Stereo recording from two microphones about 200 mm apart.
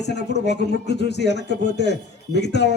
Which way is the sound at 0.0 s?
55° left (ahead or behind).